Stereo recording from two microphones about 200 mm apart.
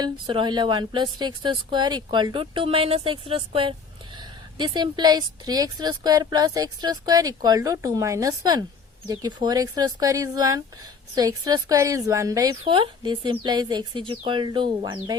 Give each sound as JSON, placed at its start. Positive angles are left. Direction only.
{"t": 0.0, "sound": "a woman's voice", "side_deg": -25}